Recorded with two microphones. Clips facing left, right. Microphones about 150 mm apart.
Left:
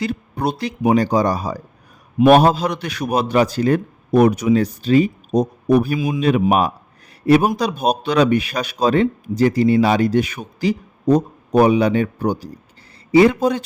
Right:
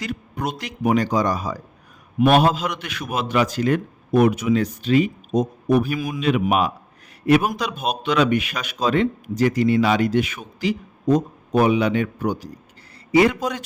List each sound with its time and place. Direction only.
0.0 s a man's voice: 30° left (ahead or behind)